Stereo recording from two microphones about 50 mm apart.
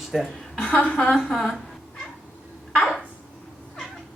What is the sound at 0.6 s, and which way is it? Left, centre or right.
Speech, left.